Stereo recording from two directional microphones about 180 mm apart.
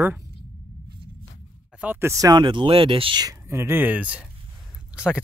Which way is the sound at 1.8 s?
10° right (ahead or behind).